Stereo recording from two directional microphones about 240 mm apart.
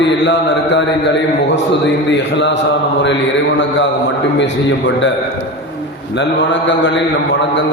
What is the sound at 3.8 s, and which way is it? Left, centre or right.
A man's voice, left.